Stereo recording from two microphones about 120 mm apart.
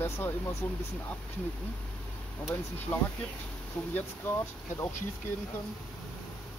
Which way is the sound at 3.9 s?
15° left (ahead or behind).